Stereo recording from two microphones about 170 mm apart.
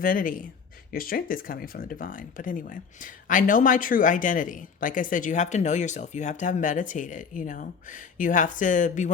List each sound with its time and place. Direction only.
0.0 s speech: 55° left (ahead or behind)